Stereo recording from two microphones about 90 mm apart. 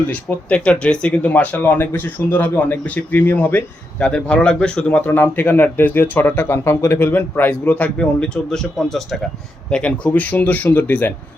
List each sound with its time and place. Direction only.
0.1 s speech: 15° left (ahead or behind)